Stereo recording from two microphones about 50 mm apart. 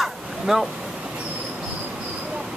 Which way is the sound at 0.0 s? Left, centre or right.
Centre.